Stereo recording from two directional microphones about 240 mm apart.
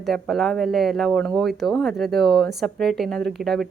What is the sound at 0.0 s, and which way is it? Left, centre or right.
Speech, centre.